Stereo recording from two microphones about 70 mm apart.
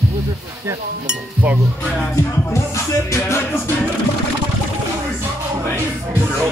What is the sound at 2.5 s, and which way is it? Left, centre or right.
Music, left.